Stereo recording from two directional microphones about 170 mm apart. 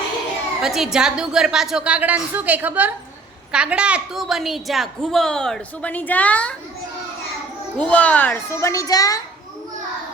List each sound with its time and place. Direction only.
0.6 s a woman's voice: centre (ahead or behind)
7.8 s a child's voice: 10° left (ahead or behind)